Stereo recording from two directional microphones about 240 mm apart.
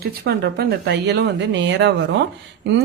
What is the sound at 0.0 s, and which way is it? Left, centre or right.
A woman's voice, right.